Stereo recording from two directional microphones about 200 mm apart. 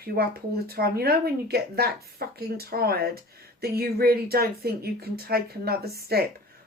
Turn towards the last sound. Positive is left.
turn(degrees=-50)  # may be behind; listen again after turning